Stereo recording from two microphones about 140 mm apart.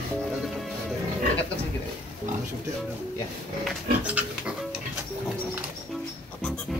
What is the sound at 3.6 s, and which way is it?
Dog, 10° right (ahead or behind).